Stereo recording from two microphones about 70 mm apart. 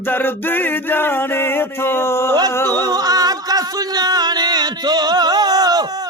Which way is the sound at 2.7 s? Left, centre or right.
Right.